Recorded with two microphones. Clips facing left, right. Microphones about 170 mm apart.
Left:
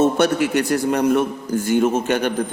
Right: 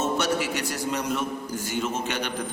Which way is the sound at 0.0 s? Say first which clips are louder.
Left 9 dB; 55° left (ahead or behind).